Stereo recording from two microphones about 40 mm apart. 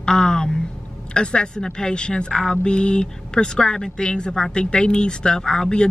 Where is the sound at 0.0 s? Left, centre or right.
Centre.